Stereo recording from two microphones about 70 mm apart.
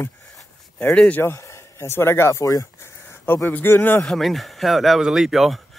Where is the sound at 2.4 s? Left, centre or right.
Left.